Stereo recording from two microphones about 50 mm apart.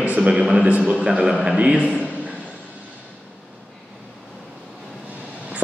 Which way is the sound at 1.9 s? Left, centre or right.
Right.